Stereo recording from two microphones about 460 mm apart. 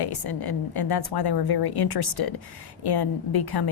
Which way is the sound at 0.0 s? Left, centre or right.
Left.